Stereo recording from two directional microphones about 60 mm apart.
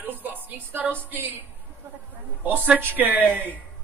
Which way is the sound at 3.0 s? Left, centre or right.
Right.